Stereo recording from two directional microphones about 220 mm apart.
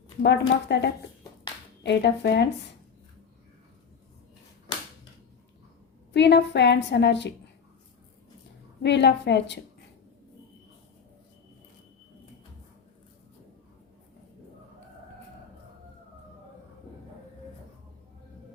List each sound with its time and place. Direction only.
0.2 s a woman's voice: 50° left (ahead or behind)
4.7 s a sound: 20° left (ahead or behind)
6.1 s a woman's voice: 50° left (ahead or behind)
8.8 s a woman's voice: 50° left (ahead or behind)